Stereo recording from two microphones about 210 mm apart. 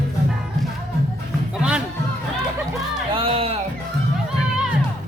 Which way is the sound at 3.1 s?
25° right (ahead or behind).